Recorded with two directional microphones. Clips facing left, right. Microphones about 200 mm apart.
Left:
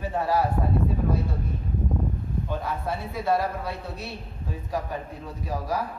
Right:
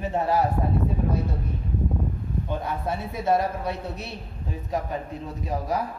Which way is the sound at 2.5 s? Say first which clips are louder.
Right 1 dB; 20° right (ahead or behind).